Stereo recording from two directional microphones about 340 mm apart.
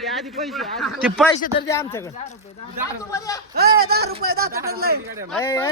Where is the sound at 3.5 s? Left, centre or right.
Right.